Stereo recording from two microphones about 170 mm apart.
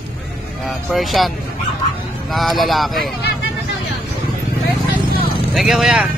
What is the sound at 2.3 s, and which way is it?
Speech, centre (ahead or behind).